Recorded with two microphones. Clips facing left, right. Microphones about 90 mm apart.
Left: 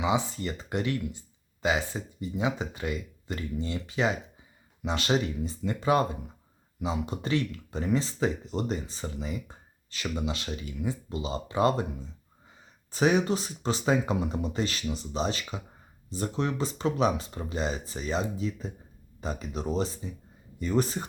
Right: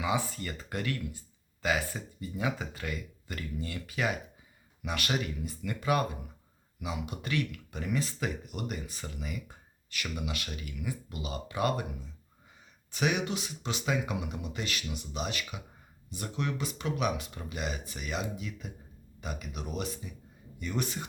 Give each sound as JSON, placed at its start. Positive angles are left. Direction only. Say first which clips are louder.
{"t": 0.0, "sound": "speech", "louder": "left 4 dB", "side_deg": 20}